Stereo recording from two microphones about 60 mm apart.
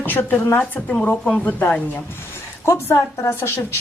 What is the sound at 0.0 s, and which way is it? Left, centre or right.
Speech, left.